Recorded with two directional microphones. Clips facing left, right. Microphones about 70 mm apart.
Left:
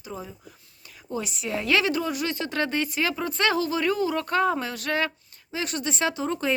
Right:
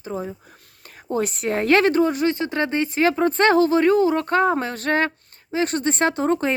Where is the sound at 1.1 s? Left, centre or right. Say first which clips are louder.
Right 7 dB; right.